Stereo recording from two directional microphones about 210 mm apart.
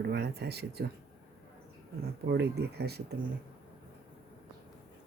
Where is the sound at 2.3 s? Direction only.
50° right (ahead or behind).